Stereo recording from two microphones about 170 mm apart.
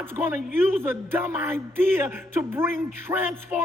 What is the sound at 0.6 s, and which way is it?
A woman's voice, 15° right (ahead or behind).